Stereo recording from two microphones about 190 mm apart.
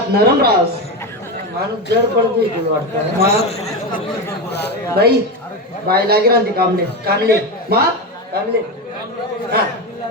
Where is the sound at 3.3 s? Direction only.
35° left (ahead or behind).